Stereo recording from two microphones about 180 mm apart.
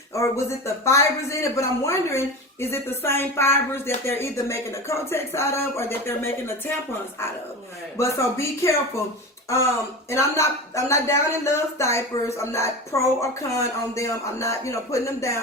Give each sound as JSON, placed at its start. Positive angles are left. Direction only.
{"t": 0.1, "sound": "speech", "side_deg": 15}
{"t": 7.9, "sound": "speech", "side_deg": 15}
{"t": 10.1, "sound": "speech", "side_deg": 15}